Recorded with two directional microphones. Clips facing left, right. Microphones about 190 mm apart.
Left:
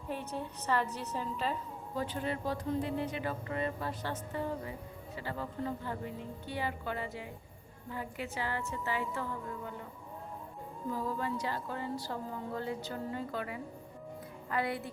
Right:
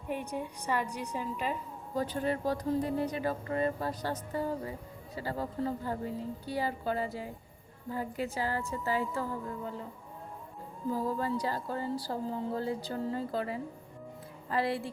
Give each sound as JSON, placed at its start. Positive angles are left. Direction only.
{"t": 0.1, "sound": "a woman's voice", "side_deg": -15}
{"t": 2.0, "sound": "speech", "side_deg": -40}
{"t": 10.9, "sound": "speech", "side_deg": -40}